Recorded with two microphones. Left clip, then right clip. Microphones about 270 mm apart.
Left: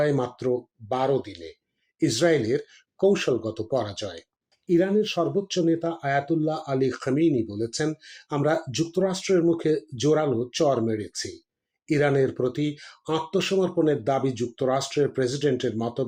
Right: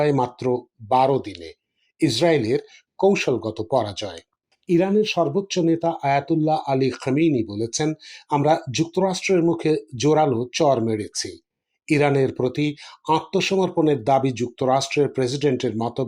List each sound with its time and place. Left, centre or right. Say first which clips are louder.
0.1 s speech: right 4 dB; centre